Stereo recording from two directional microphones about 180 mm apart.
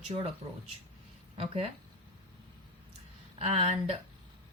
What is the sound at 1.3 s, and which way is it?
Speech, 35° right (ahead or behind).